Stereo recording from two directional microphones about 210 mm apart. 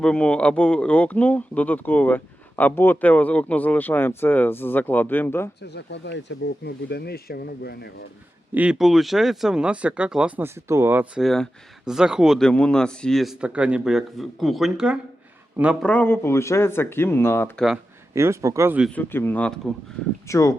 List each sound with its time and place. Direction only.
0.0 s speech: 5° left (ahead or behind)
5.6 s speech: 55° left (ahead or behind)
8.5 s speech: 5° right (ahead or behind)
15.9 s speech: 10° left (ahead or behind)
18.1 s speech: 15° right (ahead or behind)
18.9 s speech: 10° left (ahead or behind)